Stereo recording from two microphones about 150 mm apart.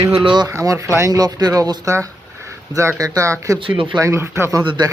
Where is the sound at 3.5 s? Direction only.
35° right (ahead or behind).